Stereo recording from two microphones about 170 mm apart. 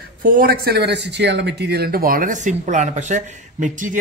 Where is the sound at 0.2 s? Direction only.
55° right (ahead or behind).